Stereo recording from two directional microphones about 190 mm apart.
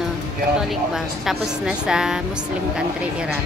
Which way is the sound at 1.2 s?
5° right (ahead or behind).